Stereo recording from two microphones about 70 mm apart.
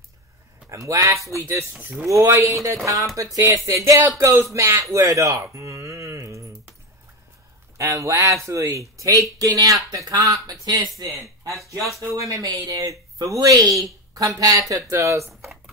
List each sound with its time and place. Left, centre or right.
0.7 s speech: right
5.5 s mantra: right
7.7 s a woman's voice: right
12.0 s speech: right
12.4 s a woman's voice: right